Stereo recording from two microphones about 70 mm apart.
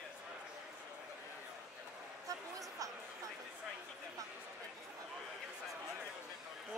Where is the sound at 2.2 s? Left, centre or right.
Right.